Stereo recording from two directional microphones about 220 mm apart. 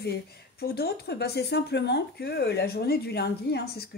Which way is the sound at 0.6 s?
45° left (ahead or behind).